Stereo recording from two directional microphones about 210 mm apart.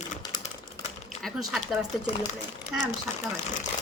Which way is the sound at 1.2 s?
Centre (ahead or behind).